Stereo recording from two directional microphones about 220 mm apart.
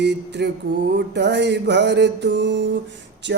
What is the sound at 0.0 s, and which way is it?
Speech, 50° right (ahead or behind).